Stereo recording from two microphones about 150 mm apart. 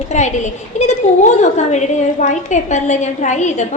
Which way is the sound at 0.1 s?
50° left (ahead or behind).